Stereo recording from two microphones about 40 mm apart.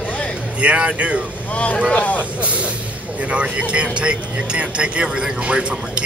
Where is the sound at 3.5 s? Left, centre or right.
Right.